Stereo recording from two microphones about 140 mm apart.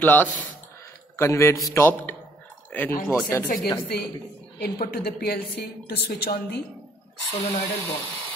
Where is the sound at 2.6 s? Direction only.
10° left (ahead or behind).